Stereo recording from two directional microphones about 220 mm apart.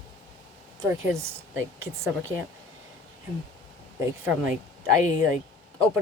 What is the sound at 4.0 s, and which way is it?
Speech, 10° right (ahead or behind).